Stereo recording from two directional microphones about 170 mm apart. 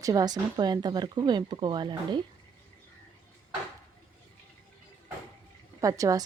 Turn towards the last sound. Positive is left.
turn(degrees=-20)  # may be behind; listen again after turning